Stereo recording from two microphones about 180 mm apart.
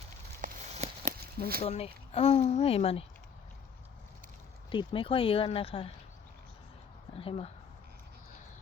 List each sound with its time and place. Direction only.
0.4 s a sound: 50° right (ahead or behind)
1.6 s speech: 35° left (ahead or behind)
4.7 s speech: 25° left (ahead or behind)
7.2 s speech: 35° left (ahead or behind)